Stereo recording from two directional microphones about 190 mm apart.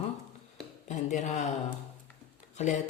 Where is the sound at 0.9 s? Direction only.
40° left (ahead or behind).